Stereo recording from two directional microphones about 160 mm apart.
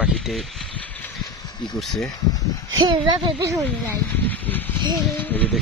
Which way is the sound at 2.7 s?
30° right (ahead or behind).